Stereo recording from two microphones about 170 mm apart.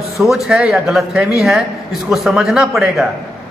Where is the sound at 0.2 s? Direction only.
Centre (ahead or behind).